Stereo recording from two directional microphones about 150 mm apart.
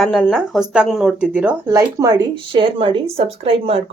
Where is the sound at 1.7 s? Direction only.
25° right (ahead or behind).